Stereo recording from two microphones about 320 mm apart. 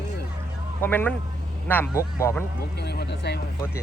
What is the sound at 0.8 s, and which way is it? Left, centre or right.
Speech, centre.